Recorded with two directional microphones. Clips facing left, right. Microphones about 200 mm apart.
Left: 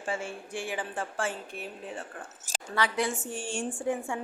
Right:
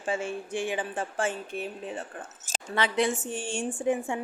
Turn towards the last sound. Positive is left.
turn(degrees=-20)  # may be behind; listen again after turning